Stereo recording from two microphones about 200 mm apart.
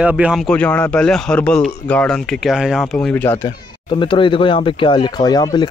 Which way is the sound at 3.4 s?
25° left (ahead or behind).